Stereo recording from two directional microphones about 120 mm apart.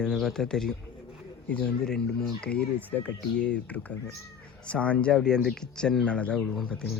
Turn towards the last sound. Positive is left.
turn(degrees=5)  # may be behind; listen again after turning